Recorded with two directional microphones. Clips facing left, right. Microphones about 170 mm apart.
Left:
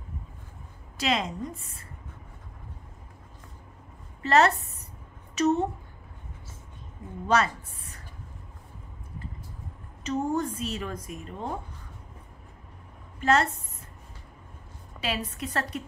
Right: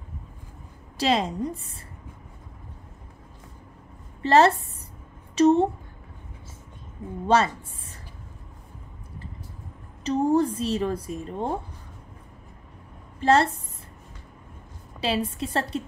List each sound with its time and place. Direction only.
0.9 s speech: 30° right (ahead or behind)
4.2 s a woman's voice: 30° right (ahead or behind)
7.2 s a woman's voice: 30° right (ahead or behind)
10.0 s speech: 35° right (ahead or behind)
13.2 s speech: 30° right (ahead or behind)
15.0 s a woman's voice: 30° right (ahead or behind)